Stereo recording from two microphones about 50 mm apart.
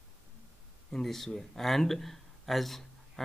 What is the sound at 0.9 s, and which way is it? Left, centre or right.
Speech, centre.